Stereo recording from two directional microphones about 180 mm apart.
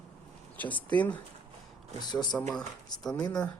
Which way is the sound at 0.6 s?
10° left (ahead or behind).